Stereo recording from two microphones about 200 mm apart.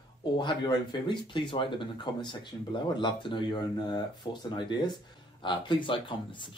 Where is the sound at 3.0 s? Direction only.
25° left (ahead or behind).